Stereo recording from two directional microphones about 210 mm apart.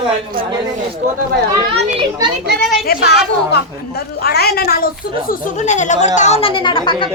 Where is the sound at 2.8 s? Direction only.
50° left (ahead or behind).